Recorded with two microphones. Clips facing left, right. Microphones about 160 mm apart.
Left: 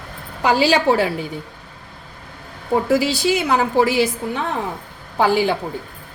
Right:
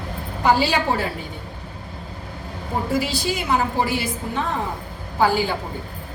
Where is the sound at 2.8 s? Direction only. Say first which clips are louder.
Left 4 dB; 90° left.